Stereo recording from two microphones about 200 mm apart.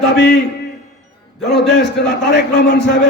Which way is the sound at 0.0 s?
60° left (ahead or behind).